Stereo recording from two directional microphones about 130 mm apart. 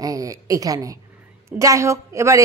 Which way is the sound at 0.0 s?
25° right (ahead or behind).